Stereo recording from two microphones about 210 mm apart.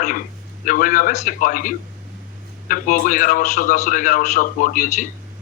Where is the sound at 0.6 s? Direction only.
40° left (ahead or behind).